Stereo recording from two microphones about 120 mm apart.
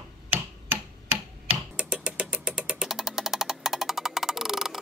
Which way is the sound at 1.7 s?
10° right (ahead or behind).